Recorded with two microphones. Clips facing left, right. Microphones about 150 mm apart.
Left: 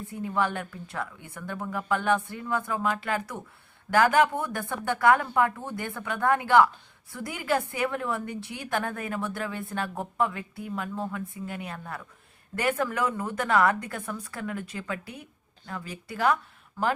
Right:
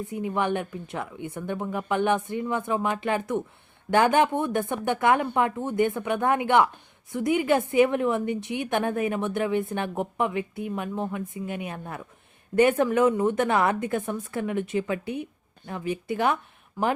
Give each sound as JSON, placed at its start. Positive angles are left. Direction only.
{"t": 0.0, "sound": "a woman's voice", "side_deg": -15}